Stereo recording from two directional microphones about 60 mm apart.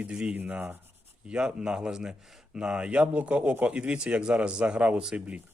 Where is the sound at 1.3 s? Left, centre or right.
Centre.